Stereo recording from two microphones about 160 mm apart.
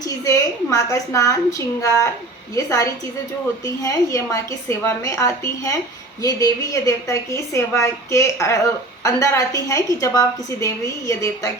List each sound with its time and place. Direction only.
0.0 s a woman's voice: 20° left (ahead or behind)